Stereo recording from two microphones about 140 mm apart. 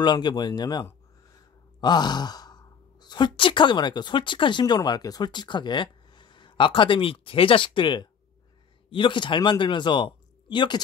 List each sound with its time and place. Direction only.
0.0 s speech: 30° left (ahead or behind)